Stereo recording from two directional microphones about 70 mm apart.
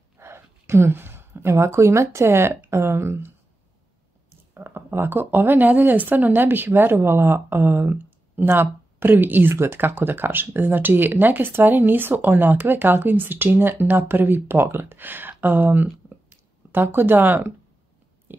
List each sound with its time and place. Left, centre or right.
0.2 s a woman's voice: right
4.6 s speech: right